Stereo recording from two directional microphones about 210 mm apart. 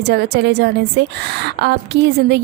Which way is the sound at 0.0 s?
55° right (ahead or behind).